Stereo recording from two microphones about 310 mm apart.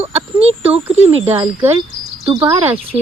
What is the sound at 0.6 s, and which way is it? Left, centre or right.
Speech, centre.